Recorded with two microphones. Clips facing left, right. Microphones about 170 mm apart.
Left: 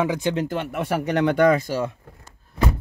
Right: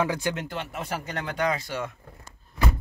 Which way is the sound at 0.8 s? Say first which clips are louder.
Left 14 dB; 70° left (ahead or behind).